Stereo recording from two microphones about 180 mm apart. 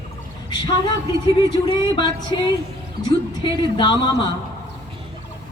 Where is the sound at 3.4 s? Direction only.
25° left (ahead or behind).